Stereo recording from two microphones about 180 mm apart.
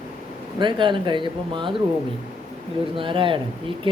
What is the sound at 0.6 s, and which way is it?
Speech, 25° right (ahead or behind).